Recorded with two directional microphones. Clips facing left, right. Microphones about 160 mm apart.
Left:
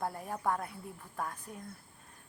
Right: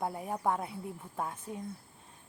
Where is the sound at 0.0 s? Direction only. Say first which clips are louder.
Right 2 dB; 15° right (ahead or behind).